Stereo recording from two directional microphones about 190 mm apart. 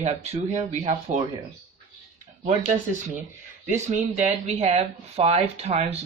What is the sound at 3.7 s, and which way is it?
Speech, 40° right (ahead or behind).